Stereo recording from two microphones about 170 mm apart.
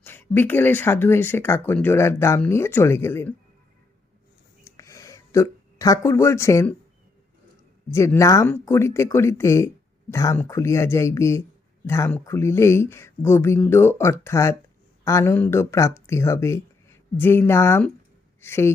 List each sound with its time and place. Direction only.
0.0 s speech: 10° left (ahead or behind)
4.6 s a sound: 20° left (ahead or behind)
7.9 s speech: 15° left (ahead or behind)